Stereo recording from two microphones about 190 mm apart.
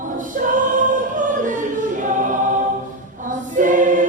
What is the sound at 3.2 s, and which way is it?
Choir, 45° right (ahead or behind).